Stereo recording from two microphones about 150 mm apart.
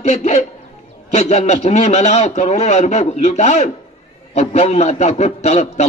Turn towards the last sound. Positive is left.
turn(degrees=45)  # may be behind; listen again after turning